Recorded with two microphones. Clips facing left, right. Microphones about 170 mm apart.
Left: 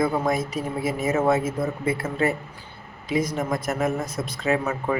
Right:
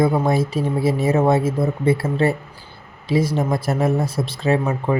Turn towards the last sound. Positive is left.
turn(degrees=-30)  # may be behind; listen again after turning